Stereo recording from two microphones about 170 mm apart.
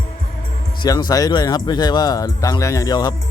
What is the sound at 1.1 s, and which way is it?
Speech, 20° left (ahead or behind).